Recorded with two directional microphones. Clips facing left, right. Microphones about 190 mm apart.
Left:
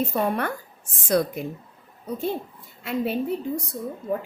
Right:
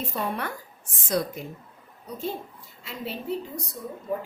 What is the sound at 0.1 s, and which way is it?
A woman's voice, 55° left (ahead or behind).